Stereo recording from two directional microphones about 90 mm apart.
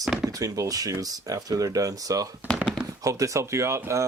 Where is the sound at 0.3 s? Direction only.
40° right (ahead or behind).